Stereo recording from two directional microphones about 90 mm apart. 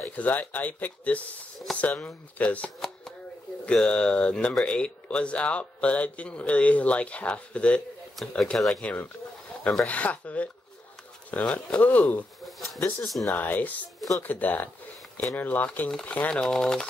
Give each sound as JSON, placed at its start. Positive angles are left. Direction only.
{"t": 0.1, "sound": "speech", "side_deg": 15}
{"t": 1.7, "sound": "speech", "side_deg": 5}
{"t": 2.0, "sound": "speech", "side_deg": 15}
{"t": 8.5, "sound": "speech", "side_deg": 0}
{"t": 9.8, "sound": "speech", "side_deg": 15}
{"t": 12.4, "sound": "bird", "side_deg": 0}
{"t": 13.3, "sound": "speech", "side_deg": 20}